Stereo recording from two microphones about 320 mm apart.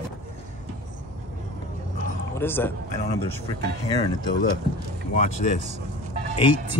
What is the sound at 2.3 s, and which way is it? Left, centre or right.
Speech, centre.